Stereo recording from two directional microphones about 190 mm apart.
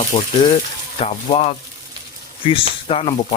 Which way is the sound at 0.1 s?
20° left (ahead or behind).